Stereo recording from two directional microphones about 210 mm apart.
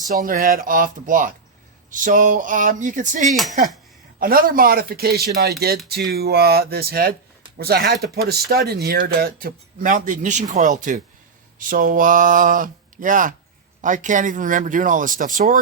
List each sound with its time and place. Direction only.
0.1 s speech: 45° right (ahead or behind)
3.2 s speech: centre (ahead or behind)
4.2 s speech: 45° right (ahead or behind)